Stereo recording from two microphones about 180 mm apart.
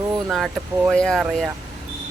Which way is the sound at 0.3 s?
Centre (ahead or behind).